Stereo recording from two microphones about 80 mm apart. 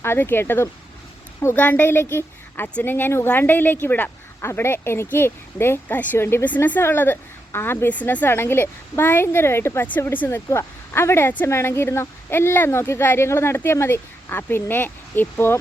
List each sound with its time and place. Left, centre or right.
0.0 s a woman's voice: left
10.2 s speech: left